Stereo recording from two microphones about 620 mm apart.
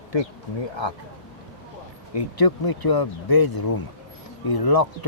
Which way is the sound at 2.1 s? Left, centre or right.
Left.